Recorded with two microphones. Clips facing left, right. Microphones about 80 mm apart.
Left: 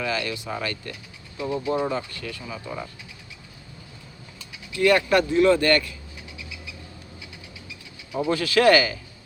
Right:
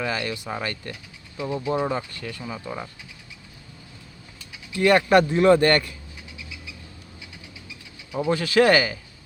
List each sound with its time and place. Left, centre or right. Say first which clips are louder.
0.0 s speech: even; right
1.4 s speech: even; centre
4.7 s speech: right 2 dB; right
8.1 s speech: right 1 dB; right